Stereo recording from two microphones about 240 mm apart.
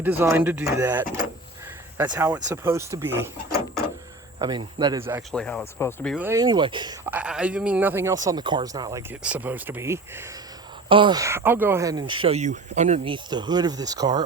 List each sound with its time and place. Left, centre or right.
0.0 s speech: centre
4.4 s speech: centre
5.3 s speech: centre
6.1 s speech: centre
7.0 s speech: centre; by 13.1 s right
13.3 s speech: centre